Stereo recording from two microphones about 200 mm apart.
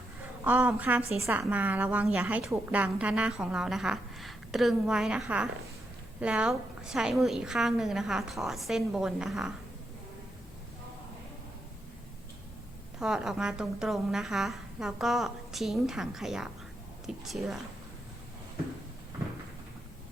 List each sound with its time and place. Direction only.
0.4 s a woman's voice: 5° right (ahead or behind)
13.0 s a woman's voice: centre (ahead or behind)